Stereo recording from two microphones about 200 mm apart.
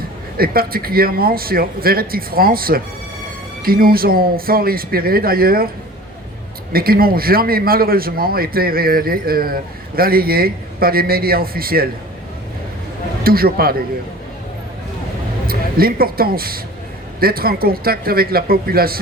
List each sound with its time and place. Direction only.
0.3 s a man's voice: 50° right (ahead or behind)
6.7 s a man's voice: 50° right (ahead or behind)
13.2 s a man's voice: 50° right (ahead or behind)
15.4 s a man's voice: 50° right (ahead or behind)